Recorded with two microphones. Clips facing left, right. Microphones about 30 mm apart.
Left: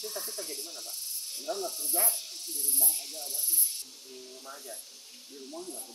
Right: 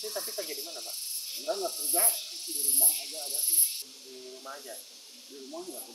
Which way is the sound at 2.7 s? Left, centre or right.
Right.